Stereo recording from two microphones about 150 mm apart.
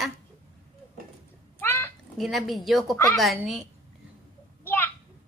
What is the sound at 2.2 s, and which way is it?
Speech, centre (ahead or behind).